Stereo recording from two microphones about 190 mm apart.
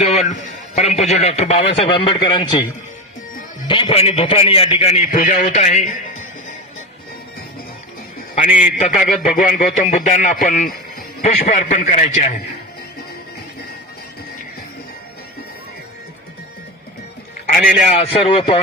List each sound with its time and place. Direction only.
0.0 s a sound: 35° left (ahead or behind)
0.8 s a man's voice: 35° left (ahead or behind)
3.7 s a man's voice: 30° left (ahead or behind)
8.4 s a man's voice: 5° right (ahead or behind)
9.2 s a man's voice: 45° left (ahead or behind)
10.4 s a sound: 40° left (ahead or behind)
11.4 s a man's voice: 35° left (ahead or behind)
17.8 s a man's voice: 35° left (ahead or behind)